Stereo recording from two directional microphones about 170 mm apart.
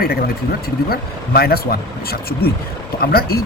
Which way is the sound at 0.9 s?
65° left (ahead or behind).